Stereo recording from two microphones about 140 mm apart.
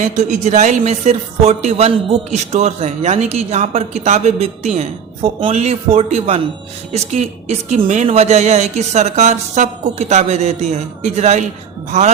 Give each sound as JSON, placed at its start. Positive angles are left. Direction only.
{"t": 0.0, "sound": "speech", "side_deg": -60}